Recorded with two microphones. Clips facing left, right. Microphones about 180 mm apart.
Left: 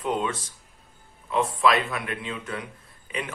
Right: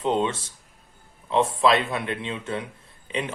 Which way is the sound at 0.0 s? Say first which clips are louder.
Right 3 dB; 25° right (ahead or behind).